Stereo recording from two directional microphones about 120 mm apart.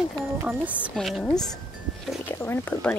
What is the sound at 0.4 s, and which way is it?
Speech, 10° right (ahead or behind).